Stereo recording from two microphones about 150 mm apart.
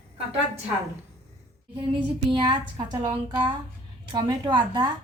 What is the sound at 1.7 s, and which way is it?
A woman's voice, 35° right (ahead or behind).